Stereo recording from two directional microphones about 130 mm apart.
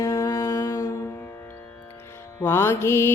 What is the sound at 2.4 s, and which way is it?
Music, 20° left (ahead or behind).